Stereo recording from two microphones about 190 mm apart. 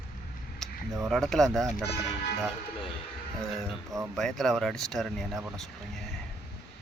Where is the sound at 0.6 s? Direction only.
5° left (ahead or behind).